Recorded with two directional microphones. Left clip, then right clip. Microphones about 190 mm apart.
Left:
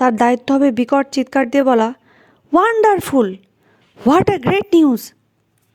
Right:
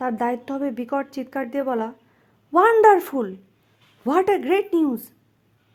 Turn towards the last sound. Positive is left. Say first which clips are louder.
# left 9 dB
turn(degrees=35)  # may be behind; listen again after turning